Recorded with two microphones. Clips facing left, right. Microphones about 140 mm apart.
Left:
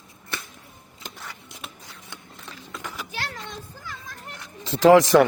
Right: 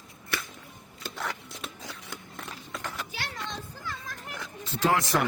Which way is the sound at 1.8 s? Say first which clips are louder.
Right 3 dB; 85° right.